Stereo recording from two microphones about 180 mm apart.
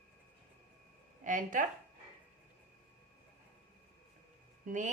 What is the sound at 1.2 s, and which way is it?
Speech, 45° right (ahead or behind).